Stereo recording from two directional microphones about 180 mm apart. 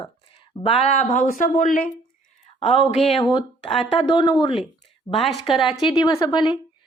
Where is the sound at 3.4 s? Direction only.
30° left (ahead or behind).